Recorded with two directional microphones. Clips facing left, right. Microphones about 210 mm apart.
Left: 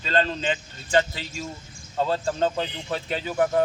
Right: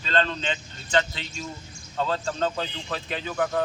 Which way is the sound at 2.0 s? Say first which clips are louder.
Left 3 dB; 15° left (ahead or behind).